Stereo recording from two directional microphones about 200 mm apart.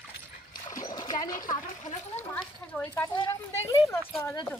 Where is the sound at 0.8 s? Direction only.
20° left (ahead or behind).